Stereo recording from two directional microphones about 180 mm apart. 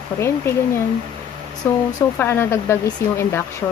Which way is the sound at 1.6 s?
10° left (ahead or behind).